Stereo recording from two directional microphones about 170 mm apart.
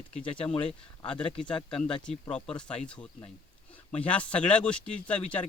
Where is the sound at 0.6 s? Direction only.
30° left (ahead or behind).